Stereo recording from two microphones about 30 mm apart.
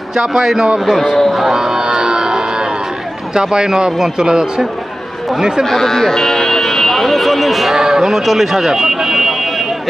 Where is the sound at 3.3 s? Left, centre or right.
Right.